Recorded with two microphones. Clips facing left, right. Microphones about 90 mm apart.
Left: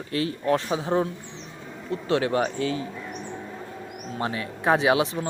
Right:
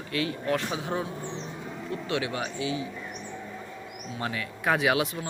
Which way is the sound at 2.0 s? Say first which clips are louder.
Left 8 dB; 35° left (ahead or behind).